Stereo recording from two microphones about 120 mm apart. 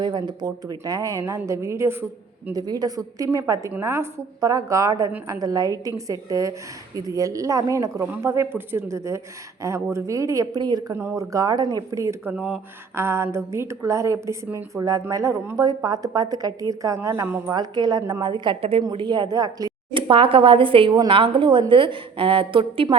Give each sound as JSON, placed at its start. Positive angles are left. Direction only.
{"t": 0.0, "sound": "a woman's voice", "side_deg": -40}
{"t": 2.5, "sound": "a woman's voice", "side_deg": -35}
{"t": 12.3, "sound": "speech", "side_deg": -10}
{"t": 13.0, "sound": "a woman's voice", "side_deg": -20}
{"t": 17.5, "sound": "a woman's voice", "side_deg": -35}
{"t": 19.9, "sound": "a woman's voice", "side_deg": -45}